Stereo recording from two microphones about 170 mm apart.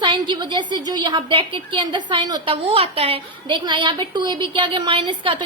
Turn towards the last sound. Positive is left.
turn(degrees=-30)  # may be behind; listen again after turning